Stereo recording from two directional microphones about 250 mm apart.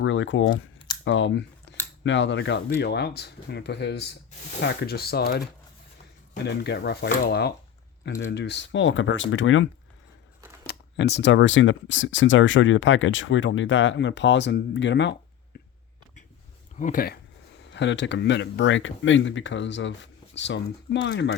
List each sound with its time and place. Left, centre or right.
0.0 s speech: left
10.7 s speech: left
15.5 s a sound: left
16.7 s speech: left
17.7 s speech: left